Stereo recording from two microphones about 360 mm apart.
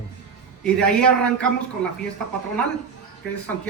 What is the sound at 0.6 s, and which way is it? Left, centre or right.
A man's voice, centre.